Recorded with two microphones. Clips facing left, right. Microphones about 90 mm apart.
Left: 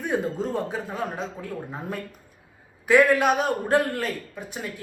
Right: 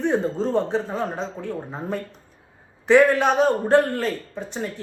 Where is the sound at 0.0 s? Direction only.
10° left (ahead or behind).